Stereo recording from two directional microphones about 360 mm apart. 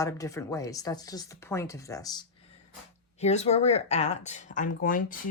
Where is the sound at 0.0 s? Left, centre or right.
Centre.